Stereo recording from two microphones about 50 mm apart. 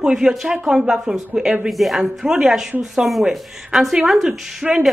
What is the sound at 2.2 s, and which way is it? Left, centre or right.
Speech, centre.